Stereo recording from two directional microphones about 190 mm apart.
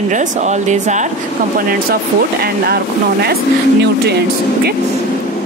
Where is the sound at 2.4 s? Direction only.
55° right (ahead or behind).